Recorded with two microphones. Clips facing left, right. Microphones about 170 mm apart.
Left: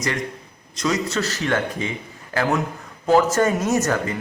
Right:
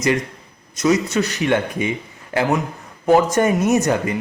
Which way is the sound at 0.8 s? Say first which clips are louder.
Right 5 dB; 20° right (ahead or behind).